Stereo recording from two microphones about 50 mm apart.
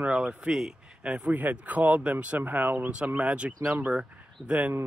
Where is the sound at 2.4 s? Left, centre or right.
Right.